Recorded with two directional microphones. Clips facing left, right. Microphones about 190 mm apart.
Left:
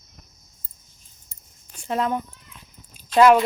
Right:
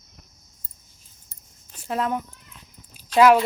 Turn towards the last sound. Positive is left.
turn(degrees=-5)  # may be behind; listen again after turning